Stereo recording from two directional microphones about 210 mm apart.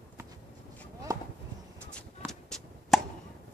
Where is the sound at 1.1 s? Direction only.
15° right (ahead or behind).